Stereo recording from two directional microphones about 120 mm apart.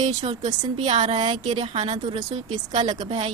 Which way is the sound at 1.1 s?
40° right (ahead or behind).